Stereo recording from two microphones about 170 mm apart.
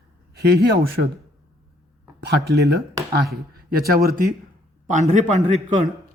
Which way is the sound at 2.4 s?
75° right (ahead or behind).